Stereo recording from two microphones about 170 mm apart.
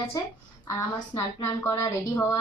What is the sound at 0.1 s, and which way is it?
Speech, 20° left (ahead or behind).